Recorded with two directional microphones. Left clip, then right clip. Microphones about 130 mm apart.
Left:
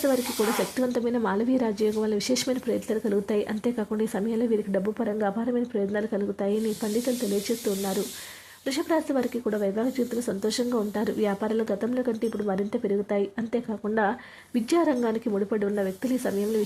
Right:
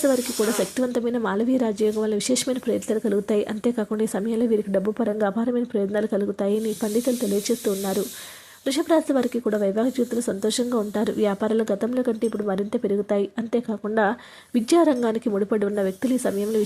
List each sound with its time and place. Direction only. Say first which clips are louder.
0.0 s speech: right 3 dB; 25° right (ahead or behind)